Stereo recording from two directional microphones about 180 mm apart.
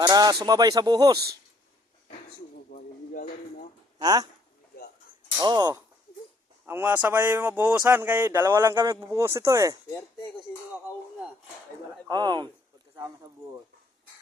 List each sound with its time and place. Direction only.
0.0 s speech: 20° right (ahead or behind)
2.6 s a sound: 50° left (ahead or behind)
3.9 s speech: 20° right (ahead or behind)
5.4 s speech: 25° right (ahead or behind)
6.7 s speech: 10° right (ahead or behind)
12.0 s speech: 25° right (ahead or behind)